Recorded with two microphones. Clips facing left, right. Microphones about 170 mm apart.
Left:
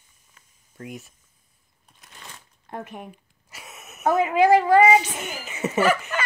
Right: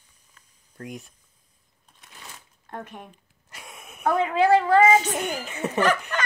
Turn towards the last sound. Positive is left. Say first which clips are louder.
# left 1 dB
turn(degrees=5)  # may be behind; listen again after turning